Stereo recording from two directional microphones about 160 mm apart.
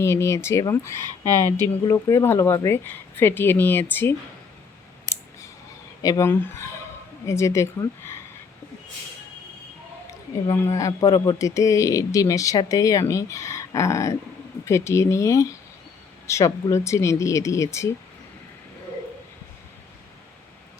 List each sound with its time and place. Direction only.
0.0 s speech: 15° left (ahead or behind)
1.0 s speech: 25° right (ahead or behind)
1.8 s speech: 20° left (ahead or behind)
6.0 s a woman's voice: 20° left (ahead or behind)
10.5 s speech: 15° left (ahead or behind)